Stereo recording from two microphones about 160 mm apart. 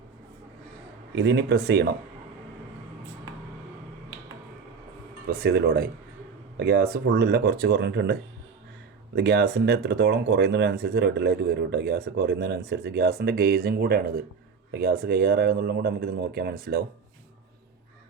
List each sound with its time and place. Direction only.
1.1 s speech: 90° right
5.3 s speech: 75° right (ahead or behind)